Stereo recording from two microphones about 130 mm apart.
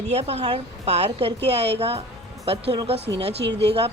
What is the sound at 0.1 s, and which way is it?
Speech, 50° right (ahead or behind).